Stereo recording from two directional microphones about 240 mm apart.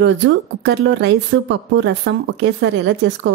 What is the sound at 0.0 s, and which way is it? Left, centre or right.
A woman's voice, right.